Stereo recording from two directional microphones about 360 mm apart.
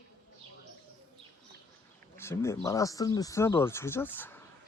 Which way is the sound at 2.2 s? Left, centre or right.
Centre.